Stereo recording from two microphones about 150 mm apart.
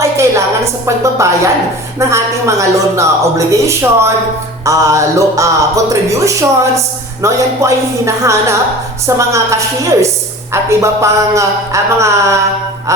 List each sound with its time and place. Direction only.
0.0 s music: 20° right (ahead or behind)
2.0 s a woman's voice: 20° right (ahead or behind)